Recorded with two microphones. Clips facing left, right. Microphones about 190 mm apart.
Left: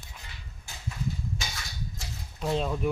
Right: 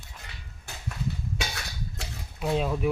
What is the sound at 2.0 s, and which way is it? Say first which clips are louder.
Cutlery: right 2 dB; 65° right (ahead or behind).